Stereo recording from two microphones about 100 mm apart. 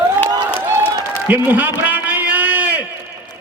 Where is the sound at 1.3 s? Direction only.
15° right (ahead or behind).